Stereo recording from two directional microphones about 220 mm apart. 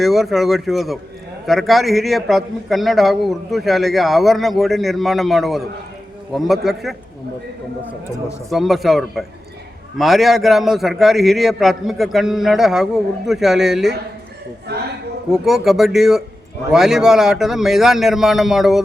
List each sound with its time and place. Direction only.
0.0 s a man's voice: centre (ahead or behind)
8.4 s a man's voice: centre (ahead or behind)
14.7 s a man's voice: 45° right (ahead or behind)
15.3 s a man's voice: centre (ahead or behind)